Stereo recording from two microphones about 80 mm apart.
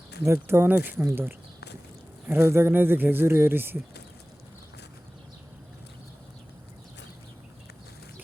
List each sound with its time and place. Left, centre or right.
0.2 s speech: right